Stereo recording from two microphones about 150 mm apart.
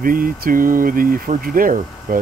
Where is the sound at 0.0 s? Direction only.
70° right (ahead or behind).